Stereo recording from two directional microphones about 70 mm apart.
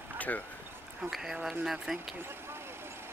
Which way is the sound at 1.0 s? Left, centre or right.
Centre.